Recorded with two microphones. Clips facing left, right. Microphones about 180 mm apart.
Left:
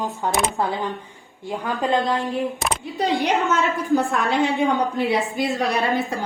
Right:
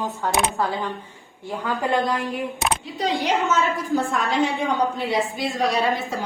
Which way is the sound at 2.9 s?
60° left (ahead or behind).